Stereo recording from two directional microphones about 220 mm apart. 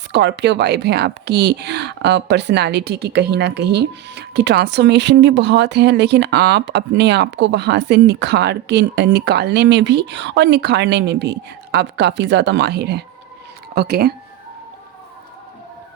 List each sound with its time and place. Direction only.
0.1 s speech: 50° right (ahead or behind)